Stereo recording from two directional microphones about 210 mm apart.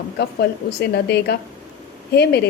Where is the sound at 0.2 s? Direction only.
50° left (ahead or behind).